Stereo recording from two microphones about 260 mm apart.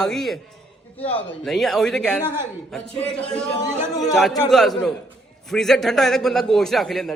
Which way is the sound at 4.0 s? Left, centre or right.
Centre.